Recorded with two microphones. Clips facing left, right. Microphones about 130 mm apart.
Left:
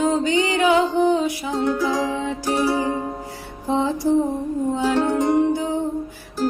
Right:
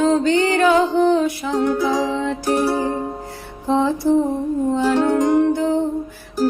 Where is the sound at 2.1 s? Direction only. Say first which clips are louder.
Right 3 dB; 15° left (ahead or behind).